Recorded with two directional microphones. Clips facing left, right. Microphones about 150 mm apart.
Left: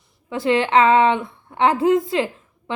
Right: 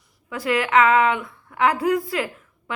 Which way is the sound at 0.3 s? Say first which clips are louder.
Left 4 dB; 25° left (ahead or behind).